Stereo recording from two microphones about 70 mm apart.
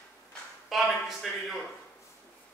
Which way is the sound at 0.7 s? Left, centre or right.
Centre.